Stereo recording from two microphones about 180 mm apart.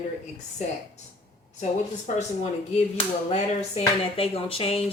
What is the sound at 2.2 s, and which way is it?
Speech, 40° left (ahead or behind).